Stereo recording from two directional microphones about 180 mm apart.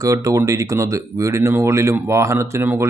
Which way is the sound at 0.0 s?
20° right (ahead or behind).